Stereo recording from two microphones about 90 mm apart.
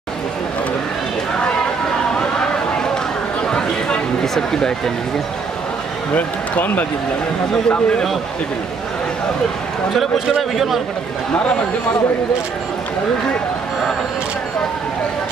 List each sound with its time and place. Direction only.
3.4 s a sound: 5° left (ahead or behind)
6.1 s speech: 20° left (ahead or behind)
7.7 s a man's voice: 5° left (ahead or behind)
9.9 s a man's voice: 5° right (ahead or behind)